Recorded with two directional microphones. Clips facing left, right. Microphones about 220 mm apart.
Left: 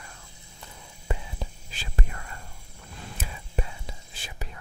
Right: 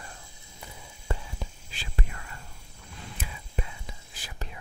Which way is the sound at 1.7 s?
45° left (ahead or behind).